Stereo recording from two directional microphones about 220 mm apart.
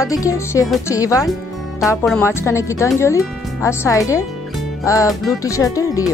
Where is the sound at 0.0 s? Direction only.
15° left (ahead or behind).